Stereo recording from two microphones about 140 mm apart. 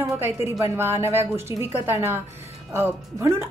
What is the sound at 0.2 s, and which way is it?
Speech, 20° right (ahead or behind).